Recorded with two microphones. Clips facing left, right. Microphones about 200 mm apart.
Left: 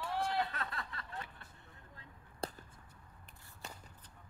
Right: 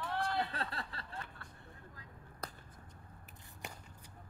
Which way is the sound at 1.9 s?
30° left (ahead or behind).